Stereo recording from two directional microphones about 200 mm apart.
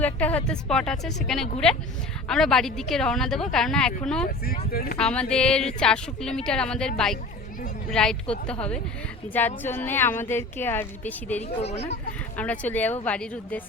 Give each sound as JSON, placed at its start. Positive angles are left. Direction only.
{"t": 0.0, "sound": "a woman's voice", "side_deg": 5}
{"t": 4.7, "sound": "speech", "side_deg": 50}
{"t": 4.9, "sound": "a woman's voice", "side_deg": 5}
{"t": 9.6, "sound": "a woman's voice", "side_deg": 10}
{"t": 11.4, "sound": "speech", "side_deg": 35}
{"t": 12.4, "sound": "a woman's voice", "side_deg": 10}